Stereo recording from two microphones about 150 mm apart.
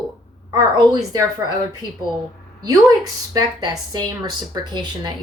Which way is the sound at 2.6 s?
25° right (ahead or behind).